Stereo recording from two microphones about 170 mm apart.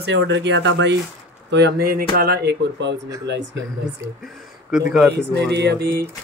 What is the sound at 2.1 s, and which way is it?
Speech, 65° right (ahead or behind).